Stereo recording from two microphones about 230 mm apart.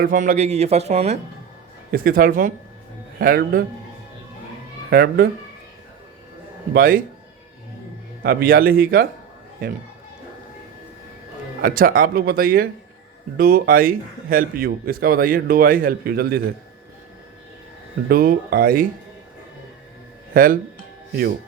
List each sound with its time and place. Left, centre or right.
0.0 s speech: right
1.9 s a man's voice: right
4.9 s a man's voice: right
6.7 s a man's voice: right
8.2 s a man's voice: right
11.6 s a man's voice: right
18.1 s a man's voice: right
20.3 s speech: right